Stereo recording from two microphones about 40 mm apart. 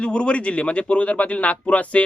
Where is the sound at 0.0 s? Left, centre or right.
Left.